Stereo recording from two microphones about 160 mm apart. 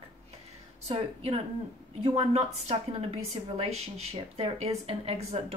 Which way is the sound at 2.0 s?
40° right (ahead or behind).